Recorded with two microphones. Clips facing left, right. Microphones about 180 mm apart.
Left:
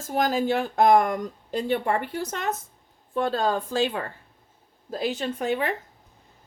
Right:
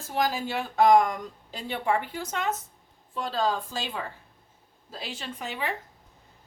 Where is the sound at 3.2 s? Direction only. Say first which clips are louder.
Left 4 dB; 55° left (ahead or behind).